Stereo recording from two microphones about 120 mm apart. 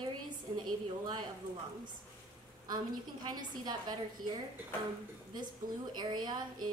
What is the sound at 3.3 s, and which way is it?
Speech, 35° right (ahead or behind).